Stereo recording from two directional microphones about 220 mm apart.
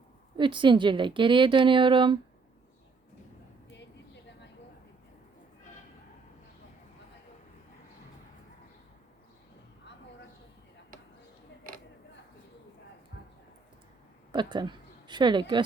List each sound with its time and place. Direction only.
0.3 s a woman's voice: 20° right (ahead or behind)
13.1 s a sound: 45° left (ahead or behind)
14.3 s a woman's voice: 20° right (ahead or behind)